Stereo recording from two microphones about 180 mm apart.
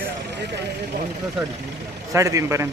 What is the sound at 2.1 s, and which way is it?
Speech, 15° right (ahead or behind).